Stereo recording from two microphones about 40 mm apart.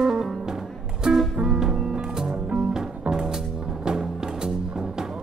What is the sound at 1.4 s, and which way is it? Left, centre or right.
Music, centre.